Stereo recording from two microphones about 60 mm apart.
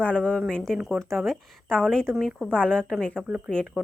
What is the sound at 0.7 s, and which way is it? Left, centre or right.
Speech, centre.